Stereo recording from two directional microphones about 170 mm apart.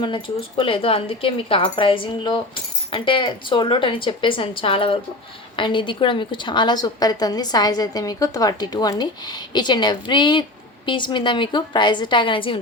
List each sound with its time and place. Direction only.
0.0 s a woman's voice: 30° left (ahead or behind)